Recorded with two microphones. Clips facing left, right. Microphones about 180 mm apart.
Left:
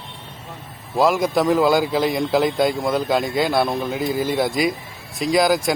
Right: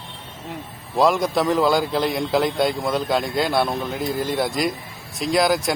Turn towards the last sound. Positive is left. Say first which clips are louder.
# left 2 dB
turn(degrees=0)  # may be behind; listen again after turning